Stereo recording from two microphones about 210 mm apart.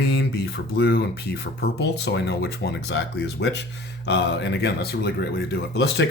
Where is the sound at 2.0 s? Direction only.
50° left (ahead or behind).